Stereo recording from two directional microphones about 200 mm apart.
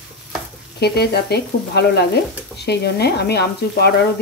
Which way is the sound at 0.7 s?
55° left (ahead or behind).